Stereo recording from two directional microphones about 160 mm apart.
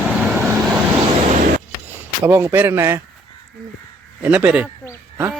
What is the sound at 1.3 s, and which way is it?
Power windows, 60° right (ahead or behind).